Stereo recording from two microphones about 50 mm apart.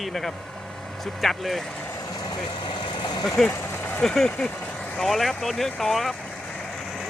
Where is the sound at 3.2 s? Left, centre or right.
Centre.